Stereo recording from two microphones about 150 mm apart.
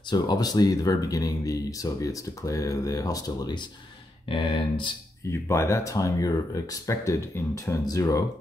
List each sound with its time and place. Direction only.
0.1 s speech: 25° left (ahead or behind)
5.3 s speech: 20° left (ahead or behind)